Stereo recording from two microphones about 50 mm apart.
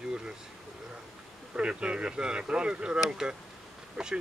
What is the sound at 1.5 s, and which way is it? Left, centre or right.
Speech, right.